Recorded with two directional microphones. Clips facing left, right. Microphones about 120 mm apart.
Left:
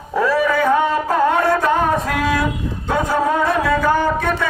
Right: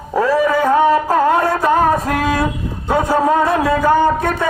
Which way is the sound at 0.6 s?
35° right (ahead or behind).